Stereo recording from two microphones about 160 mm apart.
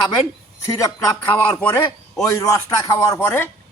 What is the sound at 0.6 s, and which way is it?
Speech, 20° left (ahead or behind).